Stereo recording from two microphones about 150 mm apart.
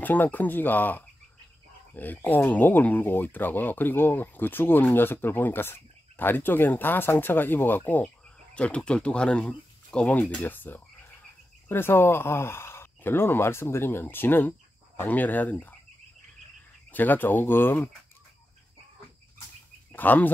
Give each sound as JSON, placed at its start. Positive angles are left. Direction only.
{"t": 0.0, "sound": "speech", "side_deg": 10}
{"t": 16.9, "sound": "speech", "side_deg": 10}
{"t": 19.9, "sound": "speech", "side_deg": 10}